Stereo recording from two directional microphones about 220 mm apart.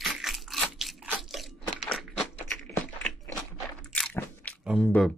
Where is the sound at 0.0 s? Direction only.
Centre (ahead or behind).